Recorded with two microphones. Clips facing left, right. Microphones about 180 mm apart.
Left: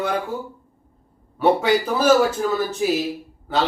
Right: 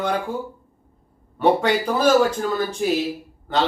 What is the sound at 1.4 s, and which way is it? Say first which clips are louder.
A man's voice: left 1 dB; 5° left (ahead or behind).